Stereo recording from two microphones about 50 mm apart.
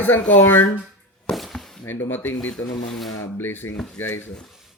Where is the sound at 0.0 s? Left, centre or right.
Left.